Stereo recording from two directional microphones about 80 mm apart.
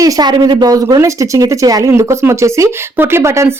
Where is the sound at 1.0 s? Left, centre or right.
Right.